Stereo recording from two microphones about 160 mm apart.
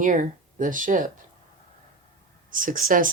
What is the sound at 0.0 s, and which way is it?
Speech, 55° right (ahead or behind).